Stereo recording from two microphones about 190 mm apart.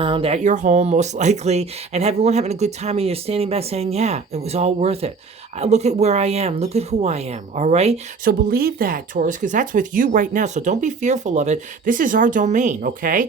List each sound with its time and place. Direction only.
0.0 s speech: 30° right (ahead or behind)
8.2 s speech: 50° right (ahead or behind)